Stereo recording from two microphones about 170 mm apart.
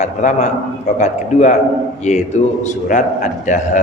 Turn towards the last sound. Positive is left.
turn(degrees=45)  # may be behind; listen again after turning